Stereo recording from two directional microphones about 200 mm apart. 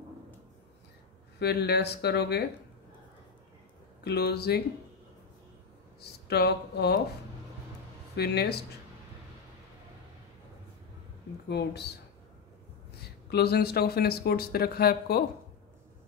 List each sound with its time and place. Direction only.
1.4 s speech: 55° left (ahead or behind)
4.0 s speech: 55° left (ahead or behind)
5.9 s speech: 55° left (ahead or behind)
8.2 s speech: 55° left (ahead or behind)
11.4 s speech: 55° left (ahead or behind)
13.3 s speech: 55° left (ahead or behind)